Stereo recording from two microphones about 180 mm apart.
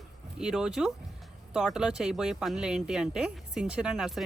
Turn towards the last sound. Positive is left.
turn(degrees=0)  # may be behind; listen again after turning